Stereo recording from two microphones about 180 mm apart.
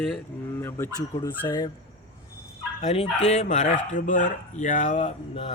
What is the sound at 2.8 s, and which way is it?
Speech, 30° left (ahead or behind).